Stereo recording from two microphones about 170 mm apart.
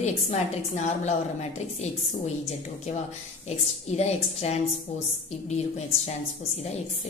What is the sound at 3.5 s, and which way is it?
A woman's voice, 40° left (ahead or behind).